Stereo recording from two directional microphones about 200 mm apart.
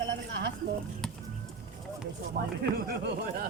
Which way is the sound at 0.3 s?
60° right (ahead or behind).